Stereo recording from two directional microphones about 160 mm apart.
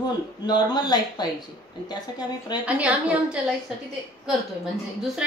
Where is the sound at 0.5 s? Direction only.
25° left (ahead or behind).